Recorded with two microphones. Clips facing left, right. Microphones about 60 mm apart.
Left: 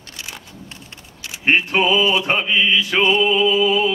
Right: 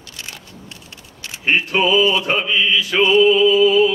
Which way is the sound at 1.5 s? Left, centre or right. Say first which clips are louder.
Even; centre.